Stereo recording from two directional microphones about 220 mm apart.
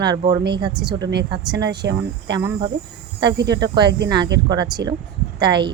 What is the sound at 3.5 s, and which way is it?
A woman's voice, 20° right (ahead or behind).